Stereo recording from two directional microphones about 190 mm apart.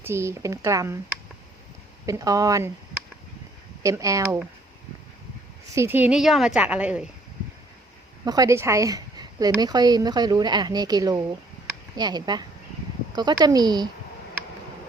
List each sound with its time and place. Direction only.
0.0 s a woman's voice: 15° right (ahead or behind)
2.0 s a woman's voice: 15° right (ahead or behind)
3.8 s a woman's voice: 15° right (ahead or behind)
5.7 s a woman's voice: 10° right (ahead or behind)
8.2 s a woman's voice: 20° right (ahead or behind)